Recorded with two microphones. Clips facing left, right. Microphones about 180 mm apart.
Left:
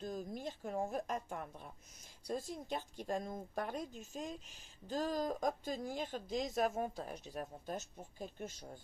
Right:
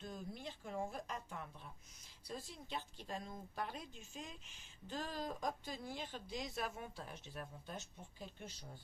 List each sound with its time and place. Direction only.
0.0 s speech: 45° left (ahead or behind)